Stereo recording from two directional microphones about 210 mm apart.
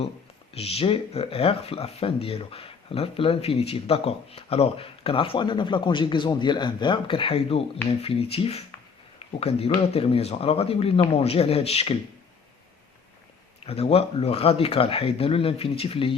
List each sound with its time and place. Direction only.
0.5 s speech: 30° left (ahead or behind)
13.7 s speech: 30° left (ahead or behind)